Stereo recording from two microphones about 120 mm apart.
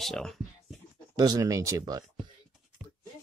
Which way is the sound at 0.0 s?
5° left (ahead or behind).